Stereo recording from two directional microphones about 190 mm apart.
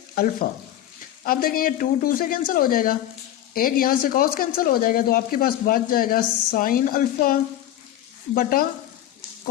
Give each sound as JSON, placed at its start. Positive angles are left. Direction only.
{"t": 1.2, "sound": "speech", "side_deg": 50}
{"t": 8.4, "sound": "speech", "side_deg": 50}